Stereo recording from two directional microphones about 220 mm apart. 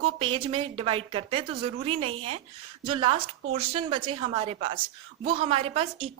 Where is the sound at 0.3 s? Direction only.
25° right (ahead or behind).